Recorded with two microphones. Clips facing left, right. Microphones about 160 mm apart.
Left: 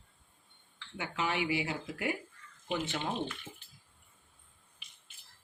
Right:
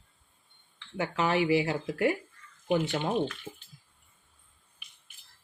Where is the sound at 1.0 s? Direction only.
40° right (ahead or behind).